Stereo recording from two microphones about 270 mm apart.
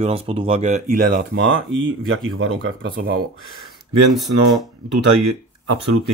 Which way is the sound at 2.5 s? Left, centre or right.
Right.